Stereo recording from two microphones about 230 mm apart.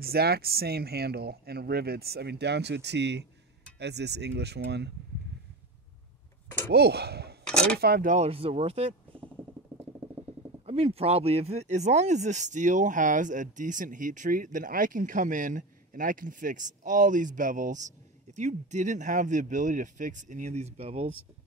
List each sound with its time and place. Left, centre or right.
0.0 s speech: right
6.7 s speech: right
10.6 s speech: right